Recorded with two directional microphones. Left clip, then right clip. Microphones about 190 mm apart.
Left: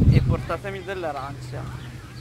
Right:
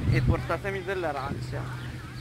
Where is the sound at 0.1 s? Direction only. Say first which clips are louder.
Left 2 dB; 50° left (ahead or behind).